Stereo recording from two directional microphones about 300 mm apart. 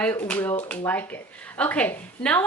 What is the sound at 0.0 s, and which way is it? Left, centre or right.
A woman's voice, centre.